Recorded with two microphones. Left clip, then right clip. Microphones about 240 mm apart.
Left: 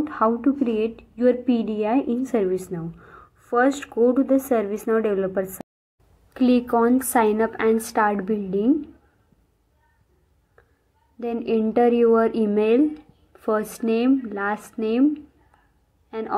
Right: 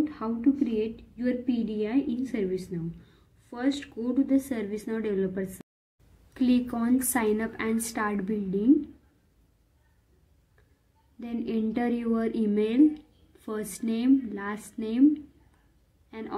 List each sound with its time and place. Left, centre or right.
0.0 s a woman's voice: centre
11.1 s a woman's voice: centre
16.1 s a woman's voice: centre